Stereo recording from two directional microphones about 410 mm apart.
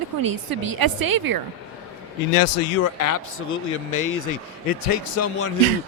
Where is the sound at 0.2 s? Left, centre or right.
Right.